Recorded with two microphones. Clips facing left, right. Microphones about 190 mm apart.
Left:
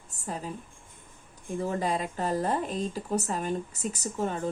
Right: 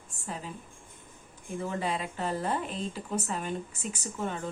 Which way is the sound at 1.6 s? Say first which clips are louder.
Left 3 dB; 40° left (ahead or behind).